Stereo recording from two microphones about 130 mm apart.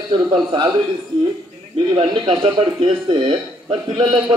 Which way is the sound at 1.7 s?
40° right (ahead or behind).